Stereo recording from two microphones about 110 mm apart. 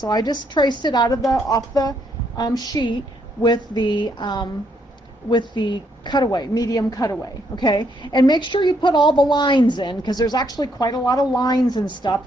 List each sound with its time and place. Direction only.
0.0 s a woman's voice: 40° left (ahead or behind)
7.5 s a woman's voice: 45° left (ahead or behind)